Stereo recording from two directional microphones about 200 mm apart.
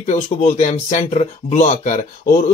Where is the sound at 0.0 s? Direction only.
35° left (ahead or behind).